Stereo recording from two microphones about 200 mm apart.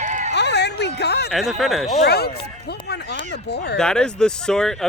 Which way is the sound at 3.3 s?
55° left (ahead or behind).